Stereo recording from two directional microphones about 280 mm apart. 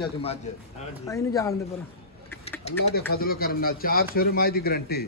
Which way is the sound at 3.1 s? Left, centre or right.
Left.